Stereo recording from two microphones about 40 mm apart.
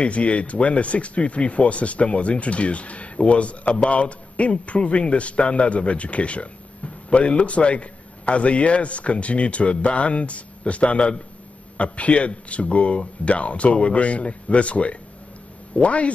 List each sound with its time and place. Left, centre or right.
0.0 s speech: left